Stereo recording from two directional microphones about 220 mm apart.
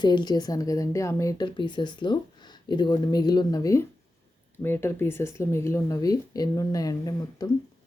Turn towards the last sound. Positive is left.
turn(degrees=15)  # may be behind; listen again after turning